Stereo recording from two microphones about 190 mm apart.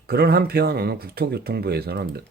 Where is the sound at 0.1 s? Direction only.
55° right (ahead or behind).